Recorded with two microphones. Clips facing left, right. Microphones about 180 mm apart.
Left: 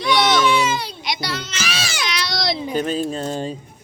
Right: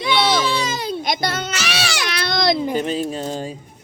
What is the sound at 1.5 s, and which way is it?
Baby cry, 75° right (ahead or behind).